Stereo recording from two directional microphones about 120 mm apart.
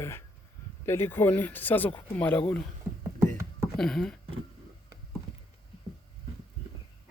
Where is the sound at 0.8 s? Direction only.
20° left (ahead or behind).